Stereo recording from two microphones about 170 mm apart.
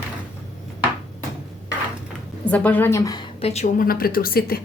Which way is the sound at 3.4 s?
40° left (ahead or behind).